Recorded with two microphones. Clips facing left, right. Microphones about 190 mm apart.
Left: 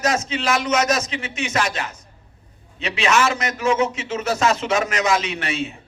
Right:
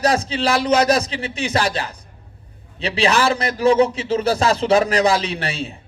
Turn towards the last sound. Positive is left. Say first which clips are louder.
# even
turn(degrees=-35)  # may be behind; listen again after turning